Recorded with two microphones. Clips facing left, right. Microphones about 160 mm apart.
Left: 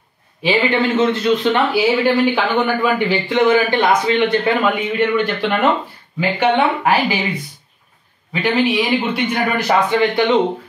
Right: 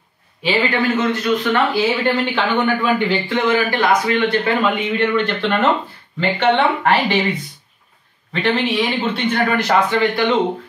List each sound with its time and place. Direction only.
0.7 s a man's voice: 25° left (ahead or behind)
1.8 s a man's voice: 10° left (ahead or behind)
3.3 s a man's voice: 20° left (ahead or behind)
8.3 s a man's voice: 10° left (ahead or behind)